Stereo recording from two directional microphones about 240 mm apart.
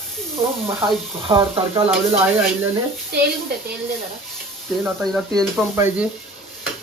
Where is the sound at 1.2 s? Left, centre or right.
Right.